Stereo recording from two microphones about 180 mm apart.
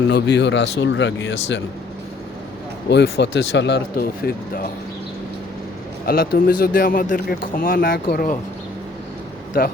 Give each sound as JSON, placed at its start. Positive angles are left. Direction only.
{"t": 0.1, "sound": "speech", "side_deg": 75}
{"t": 2.9, "sound": "speech", "side_deg": 75}
{"t": 6.1, "sound": "speech", "side_deg": 55}
{"t": 9.5, "sound": "speech", "side_deg": 55}